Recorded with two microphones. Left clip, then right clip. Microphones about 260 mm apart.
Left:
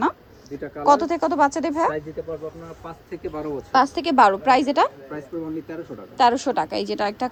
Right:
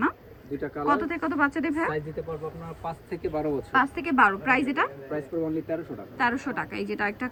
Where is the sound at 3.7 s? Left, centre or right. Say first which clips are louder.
Left 7 dB; left.